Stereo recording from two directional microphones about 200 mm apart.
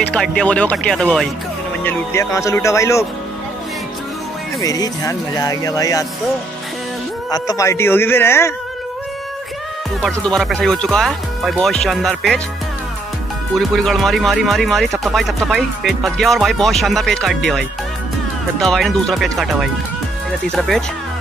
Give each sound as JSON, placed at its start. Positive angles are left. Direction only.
{"t": 0.1, "sound": "speech", "side_deg": 5}
{"t": 1.9, "sound": "speech", "side_deg": 15}
{"t": 4.6, "sound": "speech", "side_deg": 20}
{"t": 7.2, "sound": "speech", "side_deg": 20}
{"t": 10.0, "sound": "speech", "side_deg": 5}
{"t": 13.6, "sound": "speech", "side_deg": 0}